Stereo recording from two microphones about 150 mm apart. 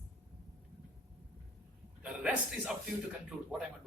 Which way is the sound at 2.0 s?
10° right (ahead or behind).